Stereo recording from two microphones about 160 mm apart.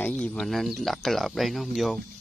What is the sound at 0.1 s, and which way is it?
Speech, 5° left (ahead or behind).